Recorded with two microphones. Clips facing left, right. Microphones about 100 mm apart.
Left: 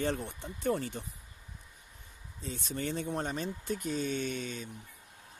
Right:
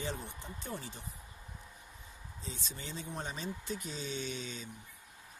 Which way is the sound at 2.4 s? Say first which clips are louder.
Left 9 dB; 55° left (ahead or behind).